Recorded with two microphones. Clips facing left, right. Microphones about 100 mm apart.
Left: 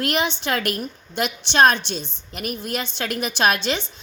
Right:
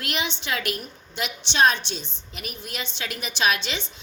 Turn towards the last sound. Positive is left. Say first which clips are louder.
# left 4 dB
turn(degrees=40)  # may be behind; listen again after turning